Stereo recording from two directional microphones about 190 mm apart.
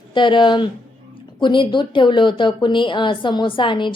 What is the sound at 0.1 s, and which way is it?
A woman's voice, 25° left (ahead or behind).